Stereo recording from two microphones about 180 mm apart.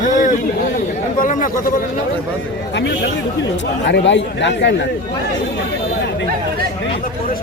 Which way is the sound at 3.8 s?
80° left.